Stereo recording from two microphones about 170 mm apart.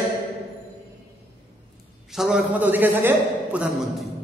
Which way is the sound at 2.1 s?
5° right (ahead or behind).